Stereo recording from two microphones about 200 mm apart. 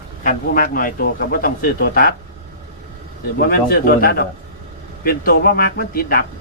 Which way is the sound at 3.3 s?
50° left (ahead or behind).